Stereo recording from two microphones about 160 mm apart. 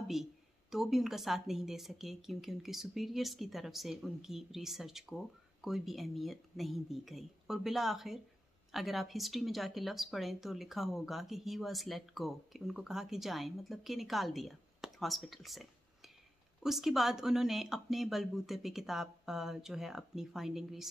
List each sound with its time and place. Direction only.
0.1 s a woman's voice: centre (ahead or behind)